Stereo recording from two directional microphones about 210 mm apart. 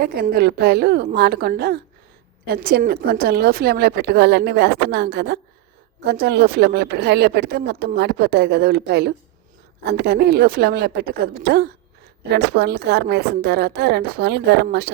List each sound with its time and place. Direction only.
0.0 s speech: 45° right (ahead or behind)